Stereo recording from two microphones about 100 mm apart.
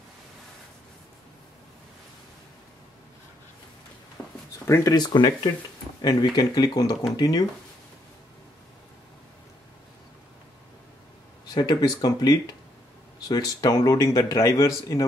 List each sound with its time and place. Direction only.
4.2 s a sound: 10° left (ahead or behind)
4.6 s speech: 30° left (ahead or behind)
4.9 s speech: 45° left (ahead or behind)
11.5 s speech: 40° left (ahead or behind)